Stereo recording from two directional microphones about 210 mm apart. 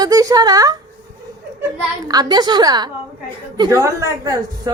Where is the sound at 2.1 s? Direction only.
20° right (ahead or behind).